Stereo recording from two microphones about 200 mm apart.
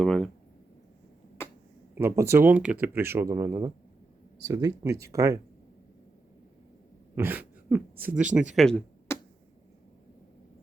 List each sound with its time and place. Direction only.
0.0 s speech: centre (ahead or behind)
1.4 s finger snapping: 10° left (ahead or behind)
2.0 s speech: 15° right (ahead or behind)
7.2 s throat clearing: 10° right (ahead or behind)
8.1 s speech: 5° right (ahead or behind)
8.5 s a sound: 5° left (ahead or behind)